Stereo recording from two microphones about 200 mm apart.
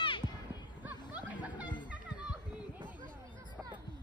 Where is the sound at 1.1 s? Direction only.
5° right (ahead or behind).